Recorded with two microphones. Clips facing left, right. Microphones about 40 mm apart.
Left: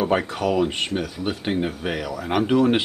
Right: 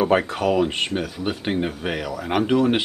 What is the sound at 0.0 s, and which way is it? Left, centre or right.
Speech, centre.